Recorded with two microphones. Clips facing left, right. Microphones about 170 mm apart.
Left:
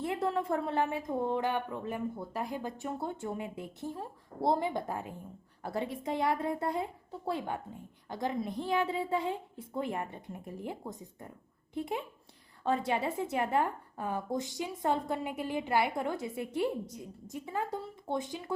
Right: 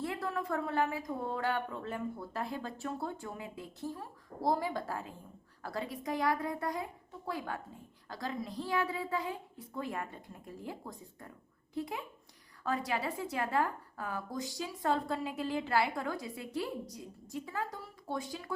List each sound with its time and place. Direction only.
0.0 s a woman's voice: 25° left (ahead or behind)